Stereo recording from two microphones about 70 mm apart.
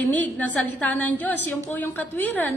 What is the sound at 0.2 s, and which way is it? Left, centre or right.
A woman's voice, left.